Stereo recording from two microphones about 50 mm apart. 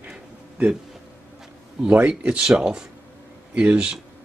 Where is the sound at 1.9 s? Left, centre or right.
Right.